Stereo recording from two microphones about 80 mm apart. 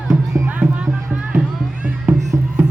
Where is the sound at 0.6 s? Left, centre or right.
Right.